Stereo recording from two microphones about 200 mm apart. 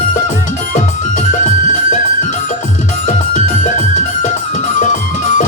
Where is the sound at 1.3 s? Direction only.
40° left (ahead or behind).